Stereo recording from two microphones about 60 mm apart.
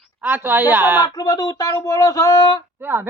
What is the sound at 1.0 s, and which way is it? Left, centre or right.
Speech, left.